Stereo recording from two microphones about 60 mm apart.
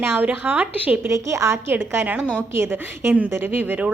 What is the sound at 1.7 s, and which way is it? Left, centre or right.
A woman's voice, right.